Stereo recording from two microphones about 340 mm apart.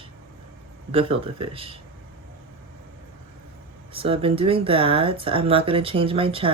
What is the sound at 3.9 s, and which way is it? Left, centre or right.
Speech, centre.